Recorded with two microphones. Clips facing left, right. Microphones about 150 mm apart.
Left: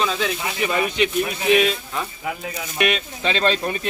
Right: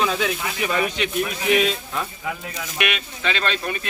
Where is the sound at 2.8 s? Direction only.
35° left (ahead or behind).